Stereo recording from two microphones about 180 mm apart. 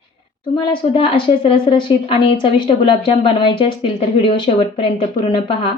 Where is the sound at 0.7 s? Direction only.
30° left (ahead or behind).